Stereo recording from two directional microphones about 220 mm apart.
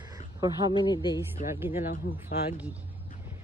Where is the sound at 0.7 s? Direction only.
20° left (ahead or behind).